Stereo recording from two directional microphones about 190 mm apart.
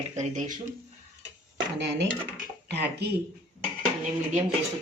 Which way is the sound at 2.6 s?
60° right (ahead or behind).